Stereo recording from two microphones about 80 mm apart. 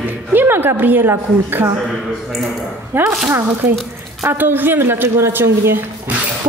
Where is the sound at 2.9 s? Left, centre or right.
Right.